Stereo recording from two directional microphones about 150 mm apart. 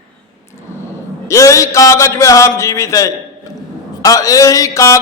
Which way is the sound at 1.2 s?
20° left (ahead or behind).